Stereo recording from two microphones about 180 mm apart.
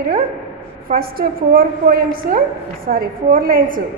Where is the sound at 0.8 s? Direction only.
55° right (ahead or behind).